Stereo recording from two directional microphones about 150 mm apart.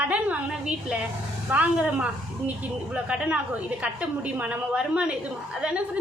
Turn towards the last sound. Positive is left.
turn(degrees=-5)  # may be behind; listen again after turning